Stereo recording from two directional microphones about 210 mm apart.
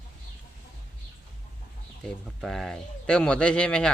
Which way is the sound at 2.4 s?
Centre (ahead or behind).